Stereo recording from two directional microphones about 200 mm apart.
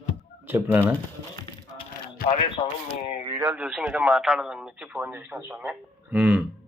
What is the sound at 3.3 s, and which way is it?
A man's voice, 10° right (ahead or behind).